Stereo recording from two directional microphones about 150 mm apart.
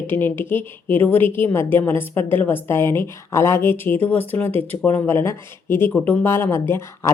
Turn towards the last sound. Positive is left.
turn(degrees=15)  # may be behind; listen again after turning